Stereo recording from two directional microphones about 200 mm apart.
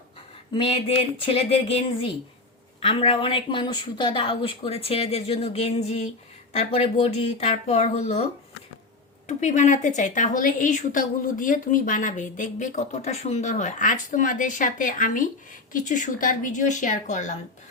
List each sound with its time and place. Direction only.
0.5 s a woman's voice: 30° left (ahead or behind)
9.2 s a woman's voice: 35° left (ahead or behind)